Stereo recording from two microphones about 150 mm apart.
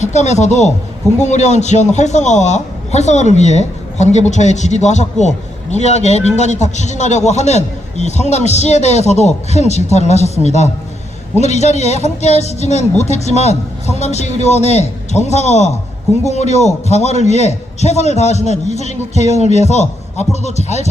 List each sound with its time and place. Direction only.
0.0 s a man's voice: 50° left (ahead or behind)